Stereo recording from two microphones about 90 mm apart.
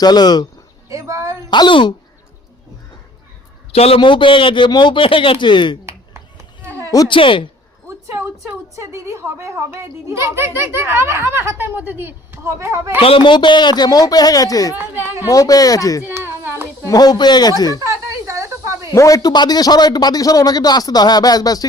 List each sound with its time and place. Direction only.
0.0 s speech: 50° left (ahead or behind)
0.9 s a sound: 35° right (ahead or behind)
1.5 s speech: 60° left (ahead or behind)
3.7 s a man's voice: 90° left; by 5.7 s 60° left (ahead or behind)
7.1 s a man's voice: 70° left (ahead or behind)
8.0 s a woman's voice: 25° right (ahead or behind)
13.0 s speech: 85° left; by 14.8 s 40° left (ahead or behind)
15.0 s a woman's voice: 30° right (ahead or behind)
15.3 s speech: 40° left (ahead or behind)
16.0 s a sound: 25° right (ahead or behind)
16.8 s speech: 45° left (ahead or behind)
17.7 s a sound: 35° right (ahead or behind)
18.9 s speech: 40° left (ahead or behind)